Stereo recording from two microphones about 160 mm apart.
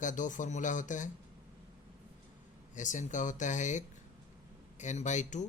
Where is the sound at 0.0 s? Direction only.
50° left (ahead or behind).